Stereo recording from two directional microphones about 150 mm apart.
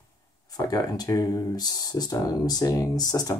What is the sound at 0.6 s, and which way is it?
Speech, 25° left (ahead or behind).